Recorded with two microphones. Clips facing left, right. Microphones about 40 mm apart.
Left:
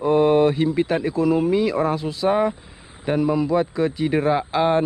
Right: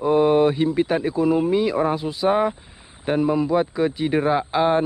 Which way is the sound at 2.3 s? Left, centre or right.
Right.